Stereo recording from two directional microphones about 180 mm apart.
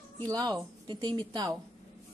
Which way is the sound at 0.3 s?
20° right (ahead or behind).